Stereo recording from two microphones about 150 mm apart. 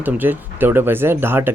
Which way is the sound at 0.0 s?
10° right (ahead or behind).